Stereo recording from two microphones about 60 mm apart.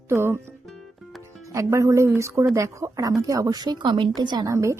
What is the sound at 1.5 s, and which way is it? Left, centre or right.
Speech, right.